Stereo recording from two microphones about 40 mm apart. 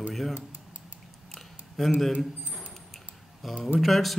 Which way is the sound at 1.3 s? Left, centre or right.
Centre.